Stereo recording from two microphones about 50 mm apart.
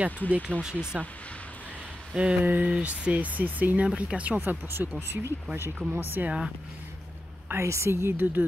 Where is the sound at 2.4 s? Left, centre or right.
Right.